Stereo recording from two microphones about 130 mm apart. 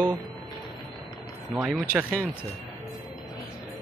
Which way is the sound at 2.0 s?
15° right (ahead or behind).